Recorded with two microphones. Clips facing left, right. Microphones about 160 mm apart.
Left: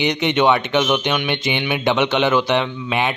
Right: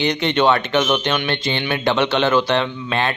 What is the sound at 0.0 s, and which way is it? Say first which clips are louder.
Speech: even; 15° left (ahead or behind).